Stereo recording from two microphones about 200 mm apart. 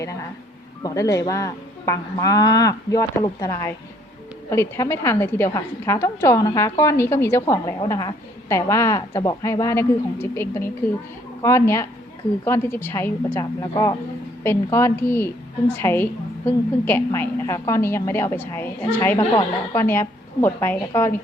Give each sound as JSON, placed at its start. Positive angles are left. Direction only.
{"t": 0.8, "sound": "a woman's voice", "side_deg": 15}